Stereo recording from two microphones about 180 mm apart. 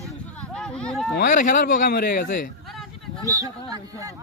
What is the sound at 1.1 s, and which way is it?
Speech, 50° left (ahead or behind).